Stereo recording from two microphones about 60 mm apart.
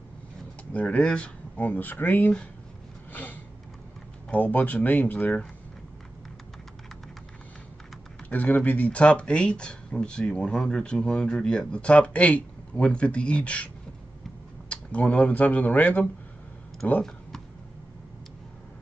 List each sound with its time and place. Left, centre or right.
0.7 s speech: centre; by 2.3 s left
3.1 s a sound: left
4.3 s speech: left
8.3 s speech: left
14.7 s speech: left